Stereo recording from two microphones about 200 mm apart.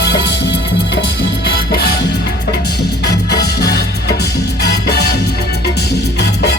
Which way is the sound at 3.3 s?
55° left (ahead or behind).